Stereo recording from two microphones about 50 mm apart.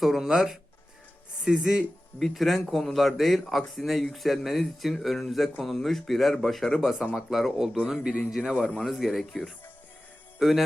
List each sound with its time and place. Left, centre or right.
0.0 s speech: centre
2.1 s speech: centre
6.8 s speech: centre
8.9 s speech: centre
10.4 s speech: centre